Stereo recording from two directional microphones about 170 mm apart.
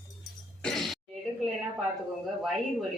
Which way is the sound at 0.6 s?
Centre (ahead or behind).